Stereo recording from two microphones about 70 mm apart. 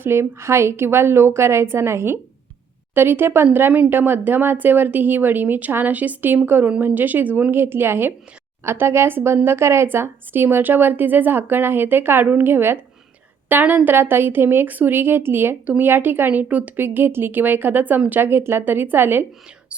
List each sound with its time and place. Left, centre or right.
0.0 s speech: right